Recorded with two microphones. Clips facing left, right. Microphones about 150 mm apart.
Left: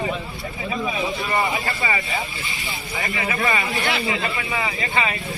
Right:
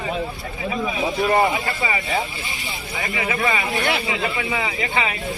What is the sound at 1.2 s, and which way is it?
Speech, 50° right (ahead or behind).